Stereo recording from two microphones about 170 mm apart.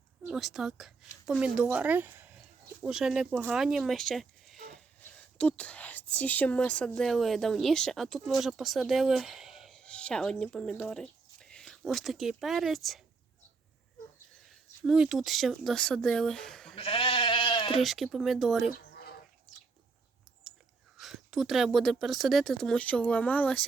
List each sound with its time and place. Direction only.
0.3 s a woman's voice: centre (ahead or behind)
14.8 s speech: 5° right (ahead or behind)
16.7 s goat: 30° left (ahead or behind)
17.8 s speech: centre (ahead or behind)
20.4 s chewing: centre (ahead or behind)
21.0 s speech: centre (ahead or behind)